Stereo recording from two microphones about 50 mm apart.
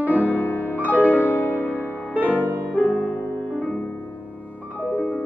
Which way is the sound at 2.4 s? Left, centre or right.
Right.